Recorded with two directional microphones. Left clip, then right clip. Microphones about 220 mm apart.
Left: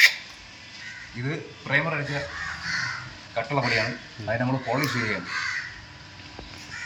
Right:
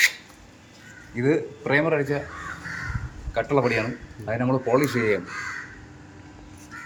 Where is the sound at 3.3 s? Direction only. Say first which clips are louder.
Right 3 dB; 20° right (ahead or behind).